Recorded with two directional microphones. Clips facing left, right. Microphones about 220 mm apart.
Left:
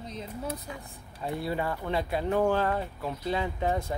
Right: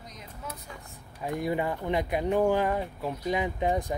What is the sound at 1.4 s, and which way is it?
Speech, 15° right (ahead or behind).